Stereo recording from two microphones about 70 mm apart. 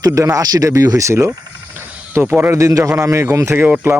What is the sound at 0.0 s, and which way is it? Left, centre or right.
Speech, right.